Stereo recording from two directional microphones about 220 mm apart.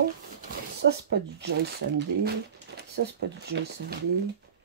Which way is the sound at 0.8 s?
50° right (ahead or behind).